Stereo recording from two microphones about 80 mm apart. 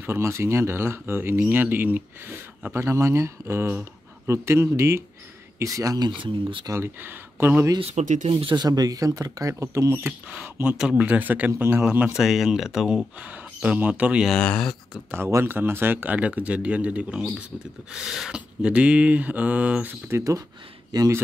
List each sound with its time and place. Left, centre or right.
0.0 s speech: right
6.7 s speech: right
8.3 s speech: right
8.6 s speech: right
10.0 s speech: centre
12.1 s speech: centre
14.2 s speech: centre
15.0 s speech: right
20.1 s speech: right